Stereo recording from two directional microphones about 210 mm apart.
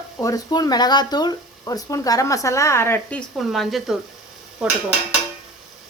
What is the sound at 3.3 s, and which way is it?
Speech, centre (ahead or behind).